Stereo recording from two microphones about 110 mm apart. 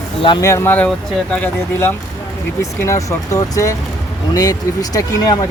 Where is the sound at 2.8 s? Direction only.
30° left (ahead or behind).